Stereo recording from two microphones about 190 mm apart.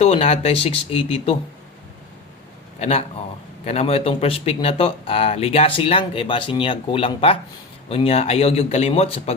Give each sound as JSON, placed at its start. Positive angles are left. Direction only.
{"t": 0.0, "sound": "speech", "side_deg": 35}
{"t": 2.7, "sound": "a man's voice", "side_deg": 35}